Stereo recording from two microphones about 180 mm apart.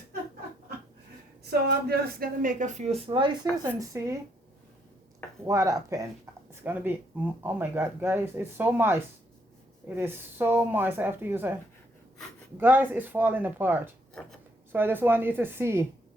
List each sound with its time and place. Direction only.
1.5 s a woman's voice: 65° right (ahead or behind); by 4.2 s 15° right (ahead or behind)
5.5 s speech: 20° right (ahead or behind)
12.5 s speech: 10° right (ahead or behind)
14.1 s a sound: 5° left (ahead or behind)
14.7 s speech: 10° right (ahead or behind)